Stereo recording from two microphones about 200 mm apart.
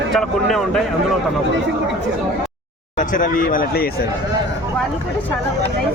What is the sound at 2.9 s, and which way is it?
Speech, 40° left (ahead or behind).